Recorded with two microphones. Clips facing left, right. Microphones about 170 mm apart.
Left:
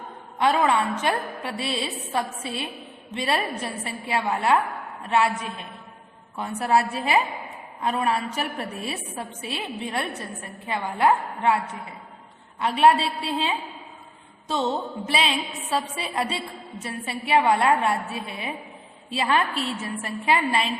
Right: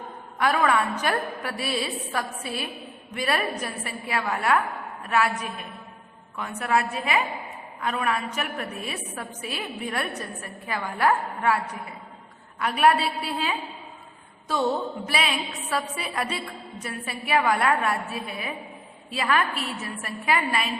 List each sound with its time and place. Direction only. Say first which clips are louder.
0.3 s a woman's voice: left 1 dB; 25° left (ahead or behind)